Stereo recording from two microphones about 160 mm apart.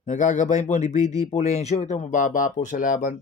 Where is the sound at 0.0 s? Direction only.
50° left (ahead or behind).